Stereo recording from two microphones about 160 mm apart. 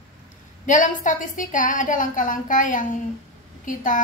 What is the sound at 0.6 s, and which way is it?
A woman's voice, 55° left (ahead or behind).